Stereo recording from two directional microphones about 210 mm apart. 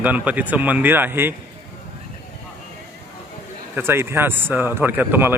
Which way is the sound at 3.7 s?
10° right (ahead or behind).